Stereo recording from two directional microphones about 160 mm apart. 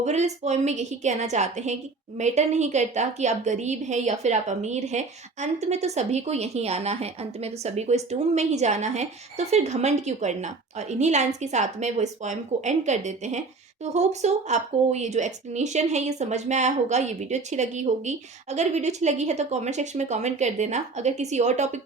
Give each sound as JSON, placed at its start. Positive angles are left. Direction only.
{"t": 0.0, "sound": "a woman's voice", "side_deg": -45}